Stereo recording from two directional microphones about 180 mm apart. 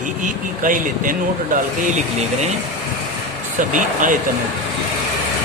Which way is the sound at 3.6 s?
45° right (ahead or behind).